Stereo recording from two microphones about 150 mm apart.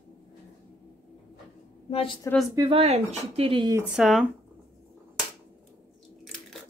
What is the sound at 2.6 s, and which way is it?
Speech, 40° right (ahead or behind).